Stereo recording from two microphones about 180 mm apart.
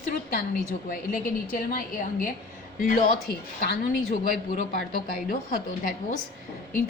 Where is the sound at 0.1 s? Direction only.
55° left (ahead or behind).